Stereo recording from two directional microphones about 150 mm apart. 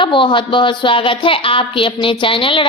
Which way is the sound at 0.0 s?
35° left (ahead or behind).